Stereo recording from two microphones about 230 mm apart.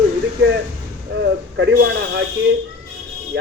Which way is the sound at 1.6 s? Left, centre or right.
Right.